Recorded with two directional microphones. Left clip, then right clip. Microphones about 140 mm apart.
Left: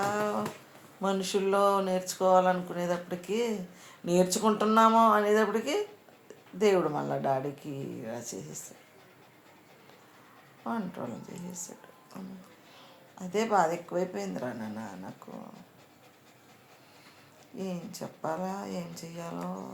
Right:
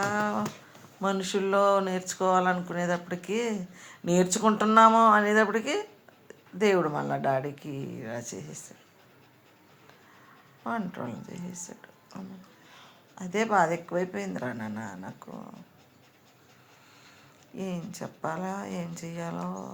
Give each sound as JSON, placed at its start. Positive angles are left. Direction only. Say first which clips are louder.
{"t": 0.0, "sound": "a sound", "louder": "right 2 dB", "side_deg": -45}
{"t": 1.0, "sound": "speech", "louder": "right 1 dB", "side_deg": -40}
{"t": 10.6, "sound": "speech", "louder": "right 2 dB", "side_deg": -50}
{"t": 12.7, "sound": "speech", "louder": "right 3 dB", "side_deg": -45}
{"t": 17.6, "sound": "speech", "louder": "right 1 dB", "side_deg": -50}